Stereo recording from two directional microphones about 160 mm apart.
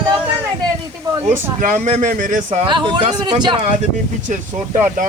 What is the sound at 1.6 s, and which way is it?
Speech, 50° right (ahead or behind).